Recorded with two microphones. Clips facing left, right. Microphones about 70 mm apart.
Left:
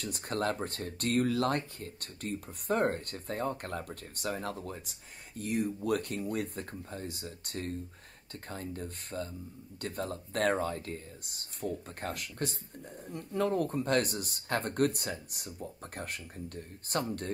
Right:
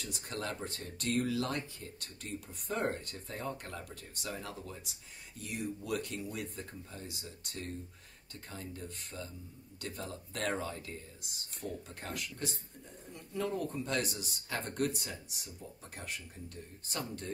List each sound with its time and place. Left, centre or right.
0.0 s speech: left